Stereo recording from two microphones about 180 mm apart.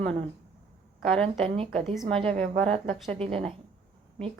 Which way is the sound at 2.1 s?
35° right (ahead or behind).